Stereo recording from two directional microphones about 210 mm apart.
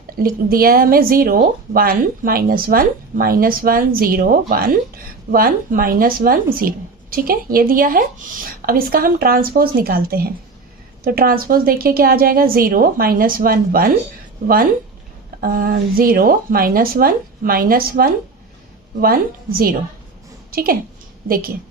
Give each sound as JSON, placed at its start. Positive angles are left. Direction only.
{"t": 0.2, "sound": "a woman's voice", "side_deg": -45}